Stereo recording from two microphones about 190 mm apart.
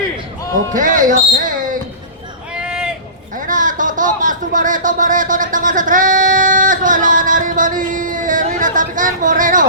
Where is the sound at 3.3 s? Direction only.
45° right (ahead or behind).